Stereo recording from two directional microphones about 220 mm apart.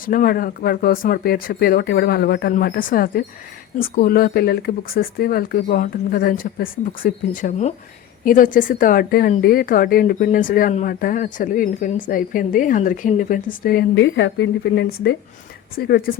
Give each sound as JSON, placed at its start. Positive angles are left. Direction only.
{"t": 0.0, "sound": "speech", "side_deg": 40}